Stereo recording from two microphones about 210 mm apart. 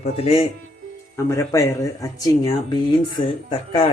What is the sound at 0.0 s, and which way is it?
Speech, 30° left (ahead or behind).